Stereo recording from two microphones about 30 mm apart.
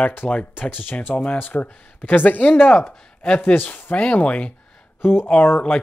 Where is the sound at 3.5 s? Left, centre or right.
Left.